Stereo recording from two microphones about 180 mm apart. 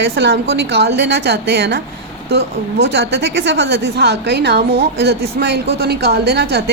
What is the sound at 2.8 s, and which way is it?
A woman's voice, 70° right (ahead or behind).